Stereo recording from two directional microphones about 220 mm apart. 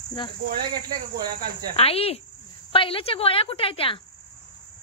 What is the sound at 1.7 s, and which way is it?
Speech, 25° left (ahead or behind).